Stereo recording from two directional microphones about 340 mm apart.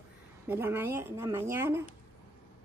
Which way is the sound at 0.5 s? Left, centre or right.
Centre.